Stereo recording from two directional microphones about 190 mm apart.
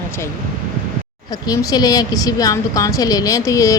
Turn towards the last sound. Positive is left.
turn(degrees=15)  # may be behind; listen again after turning